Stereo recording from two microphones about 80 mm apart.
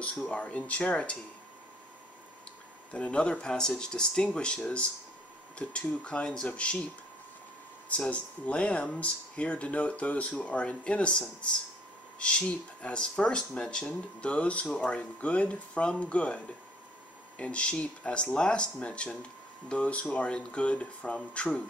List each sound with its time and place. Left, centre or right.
0.3 s speech: centre
2.9 s speech: centre
8.0 s speech: centre
17.4 s speech: centre